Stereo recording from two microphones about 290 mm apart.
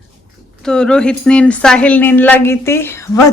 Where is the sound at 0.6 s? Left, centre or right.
Centre.